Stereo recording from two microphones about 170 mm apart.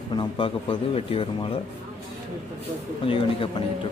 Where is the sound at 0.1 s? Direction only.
30° left (ahead or behind).